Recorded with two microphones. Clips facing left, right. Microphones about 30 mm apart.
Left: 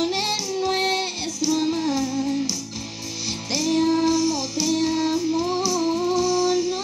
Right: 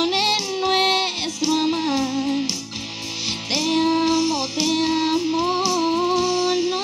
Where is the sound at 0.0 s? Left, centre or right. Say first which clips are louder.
Right 4 dB; right.